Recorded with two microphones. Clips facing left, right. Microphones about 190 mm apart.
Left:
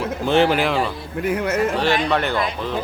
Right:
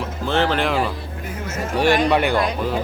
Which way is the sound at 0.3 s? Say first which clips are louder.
Left 3 dB; 15° left (ahead or behind).